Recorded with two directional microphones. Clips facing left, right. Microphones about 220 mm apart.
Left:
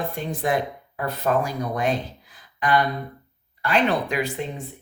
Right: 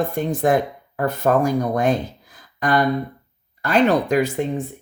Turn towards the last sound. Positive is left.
turn(degrees=-45)  # may be behind; listen again after turning